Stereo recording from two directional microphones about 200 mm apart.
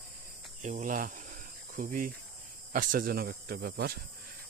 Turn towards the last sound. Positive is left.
turn(degrees=-50)  # may be behind; listen again after turning